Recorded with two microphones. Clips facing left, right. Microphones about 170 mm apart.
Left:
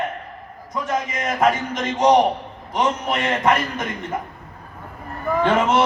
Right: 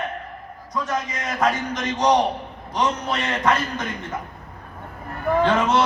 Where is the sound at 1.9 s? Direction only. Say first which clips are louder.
Left 3 dB; 20° left (ahead or behind).